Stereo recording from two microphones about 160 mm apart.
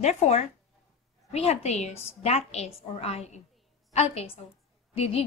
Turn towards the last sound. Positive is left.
turn(degrees=35)  # may be behind; listen again after turning